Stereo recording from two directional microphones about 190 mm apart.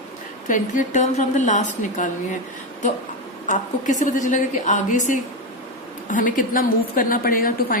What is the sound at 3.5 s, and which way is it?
A woman's voice, 40° left (ahead or behind).